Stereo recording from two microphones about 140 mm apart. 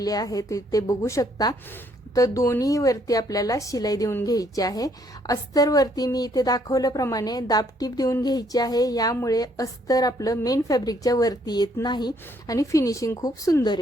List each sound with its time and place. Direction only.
0.0 s a woman's voice: 25° left (ahead or behind)